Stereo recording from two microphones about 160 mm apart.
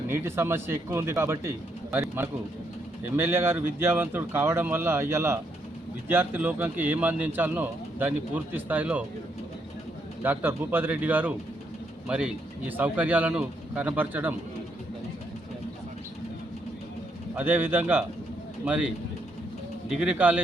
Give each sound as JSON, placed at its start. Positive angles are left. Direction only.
{"t": 0.1, "sound": "speech", "side_deg": -15}
{"t": 10.2, "sound": "speech", "side_deg": -10}
{"t": 17.3, "sound": "speech", "side_deg": -10}
{"t": 19.9, "sound": "speech", "side_deg": -5}